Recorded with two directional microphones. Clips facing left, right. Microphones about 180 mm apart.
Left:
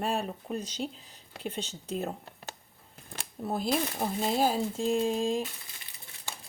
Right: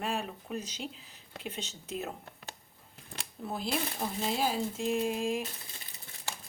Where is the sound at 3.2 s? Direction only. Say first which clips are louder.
Left 5 dB; 45° left (ahead or behind); by 5.4 s 30° left (ahead or behind).